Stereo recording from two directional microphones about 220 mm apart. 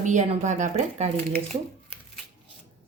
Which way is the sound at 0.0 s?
30° right (ahead or behind).